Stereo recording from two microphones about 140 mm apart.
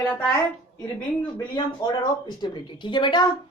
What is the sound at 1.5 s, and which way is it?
A woman's voice, 35° left (ahead or behind).